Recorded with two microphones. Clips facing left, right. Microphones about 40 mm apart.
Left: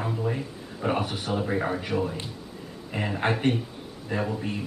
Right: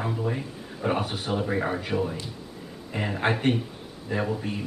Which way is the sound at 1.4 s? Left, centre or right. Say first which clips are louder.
Even; centre.